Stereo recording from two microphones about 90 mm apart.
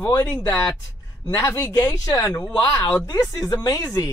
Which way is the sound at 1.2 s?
40° left (ahead or behind).